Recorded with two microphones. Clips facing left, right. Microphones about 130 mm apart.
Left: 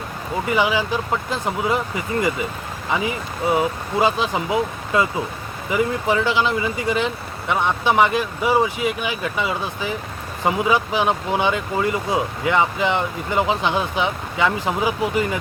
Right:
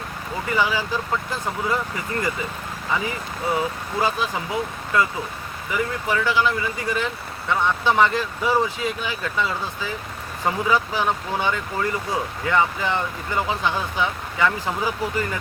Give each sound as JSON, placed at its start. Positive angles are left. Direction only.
{"t": 0.4, "sound": "speech", "side_deg": 20}
{"t": 3.5, "sound": "speech", "side_deg": 20}